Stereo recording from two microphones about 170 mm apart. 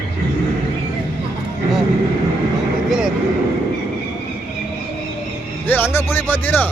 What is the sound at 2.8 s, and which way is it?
Speech, 5° right (ahead or behind).